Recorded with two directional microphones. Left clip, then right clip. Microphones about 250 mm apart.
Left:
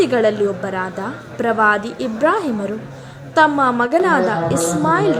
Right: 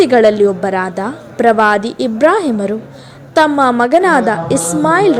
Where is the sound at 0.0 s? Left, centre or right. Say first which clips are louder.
Right 7 dB; right.